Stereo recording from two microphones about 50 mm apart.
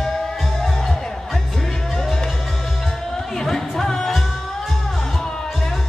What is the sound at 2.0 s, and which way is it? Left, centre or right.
Music, centre.